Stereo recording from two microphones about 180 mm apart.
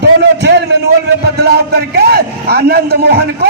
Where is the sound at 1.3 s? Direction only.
60° right (ahead or behind).